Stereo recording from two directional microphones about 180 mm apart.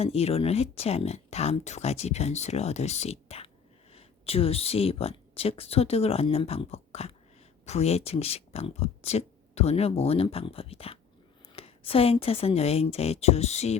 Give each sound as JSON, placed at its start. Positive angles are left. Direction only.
{"t": 0.0, "sound": "speech", "side_deg": 35}